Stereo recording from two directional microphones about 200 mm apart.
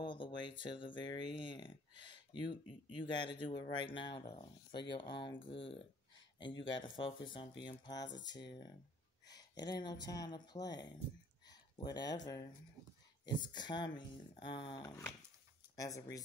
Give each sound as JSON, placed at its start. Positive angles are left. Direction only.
{"t": 0.0, "sound": "speech", "side_deg": 25}